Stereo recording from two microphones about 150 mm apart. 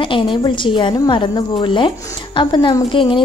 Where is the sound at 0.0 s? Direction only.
35° left (ahead or behind).